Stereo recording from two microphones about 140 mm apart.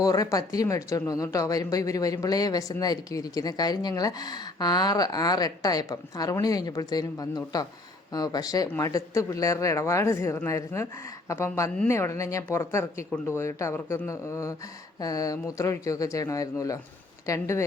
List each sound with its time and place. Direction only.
0.0 s speech: 25° left (ahead or behind)